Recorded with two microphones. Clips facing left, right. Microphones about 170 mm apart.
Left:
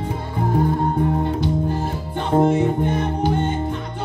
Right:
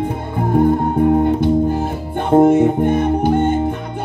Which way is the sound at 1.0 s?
50° right (ahead or behind).